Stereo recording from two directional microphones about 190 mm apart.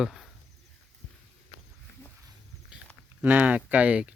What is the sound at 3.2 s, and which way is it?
Speech, 10° right (ahead or behind).